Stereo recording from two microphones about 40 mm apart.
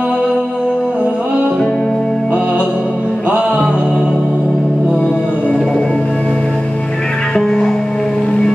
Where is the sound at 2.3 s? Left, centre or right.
Right.